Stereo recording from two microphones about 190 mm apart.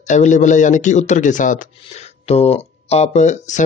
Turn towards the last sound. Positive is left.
turn(degrees=40)  # may be behind; listen again after turning